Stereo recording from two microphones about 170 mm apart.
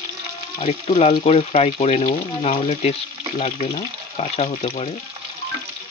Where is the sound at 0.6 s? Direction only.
40° left (ahead or behind).